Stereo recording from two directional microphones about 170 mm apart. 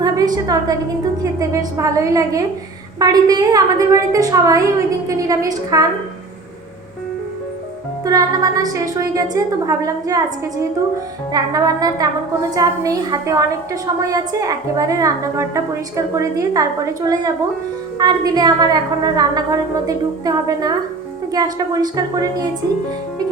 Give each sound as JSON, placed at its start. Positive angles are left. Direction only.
{"t": 0.0, "sound": "a woman's voice", "side_deg": -20}
{"t": 8.0, "sound": "a woman's voice", "side_deg": -20}